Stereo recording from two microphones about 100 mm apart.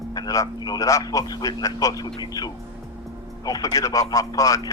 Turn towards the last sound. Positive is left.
turn(degrees=35)  # may be behind; listen again after turning